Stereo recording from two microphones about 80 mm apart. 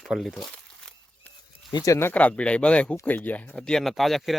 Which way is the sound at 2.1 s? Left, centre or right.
Centre.